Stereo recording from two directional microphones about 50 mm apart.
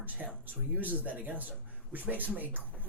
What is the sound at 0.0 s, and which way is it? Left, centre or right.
Speech, right.